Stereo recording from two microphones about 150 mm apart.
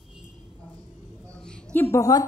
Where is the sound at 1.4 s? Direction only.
15° left (ahead or behind).